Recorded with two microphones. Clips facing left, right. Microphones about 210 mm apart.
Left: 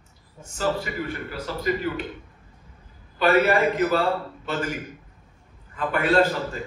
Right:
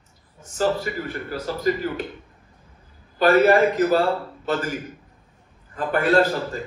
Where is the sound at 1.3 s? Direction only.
40° right (ahead or behind).